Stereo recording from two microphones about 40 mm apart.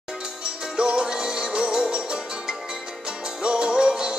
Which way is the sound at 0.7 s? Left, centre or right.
Centre.